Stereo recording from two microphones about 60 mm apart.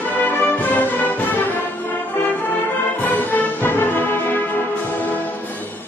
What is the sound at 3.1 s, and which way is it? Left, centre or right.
Music, left.